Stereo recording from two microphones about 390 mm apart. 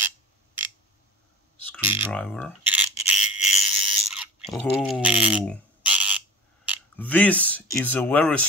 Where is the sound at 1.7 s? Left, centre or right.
Centre.